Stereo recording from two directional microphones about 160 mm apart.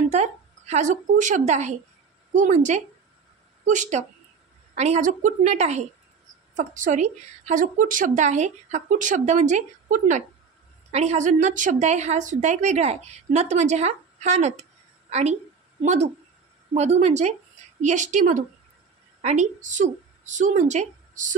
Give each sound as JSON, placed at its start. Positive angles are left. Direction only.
{"t": 0.1, "sound": "a woman's voice", "side_deg": -45}